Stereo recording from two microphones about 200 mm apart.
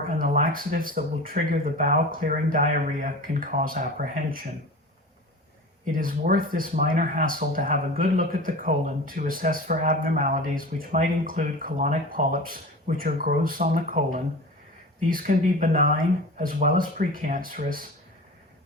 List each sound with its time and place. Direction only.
0.2 s speech: 40° right (ahead or behind)
6.0 s speech: 45° right (ahead or behind)